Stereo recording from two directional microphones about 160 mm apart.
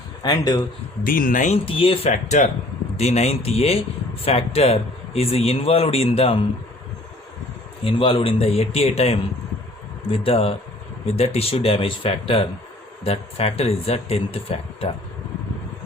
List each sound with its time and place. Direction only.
0.2 s speech: 25° left (ahead or behind)
1.0 s speech: 60° left (ahead or behind); by 6.4 s 35° left (ahead or behind)
7.9 s speech: 35° left (ahead or behind)